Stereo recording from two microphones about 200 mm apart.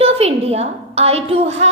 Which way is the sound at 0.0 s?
30° right (ahead or behind).